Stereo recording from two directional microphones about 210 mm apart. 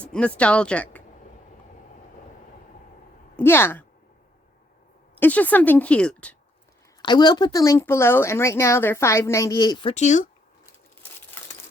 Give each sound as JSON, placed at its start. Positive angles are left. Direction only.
{"t": 0.0, "sound": "speech", "side_deg": 5}
{"t": 3.3, "sound": "speech", "side_deg": 10}
{"t": 5.1, "sound": "speech", "side_deg": 10}
{"t": 7.0, "sound": "speech", "side_deg": 20}